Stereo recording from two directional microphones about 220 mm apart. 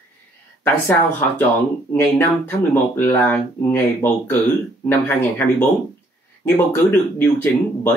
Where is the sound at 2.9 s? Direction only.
10° left (ahead or behind).